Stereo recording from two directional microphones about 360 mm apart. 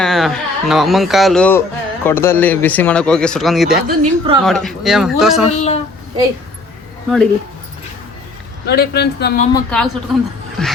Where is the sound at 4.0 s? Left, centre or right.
Centre.